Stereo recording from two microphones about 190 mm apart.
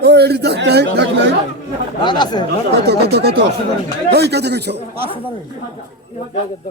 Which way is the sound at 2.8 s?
60° right (ahead or behind).